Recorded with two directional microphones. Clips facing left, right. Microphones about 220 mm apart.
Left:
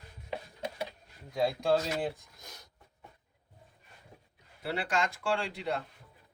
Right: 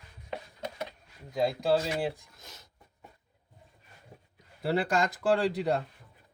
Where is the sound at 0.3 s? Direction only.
10° left (ahead or behind).